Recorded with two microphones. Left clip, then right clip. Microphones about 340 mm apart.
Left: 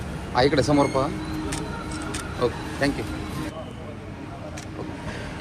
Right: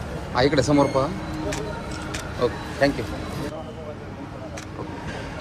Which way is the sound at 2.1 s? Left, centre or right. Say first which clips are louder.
Right 1 dB; centre.